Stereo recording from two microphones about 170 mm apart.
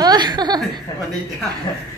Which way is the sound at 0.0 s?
25° right (ahead or behind).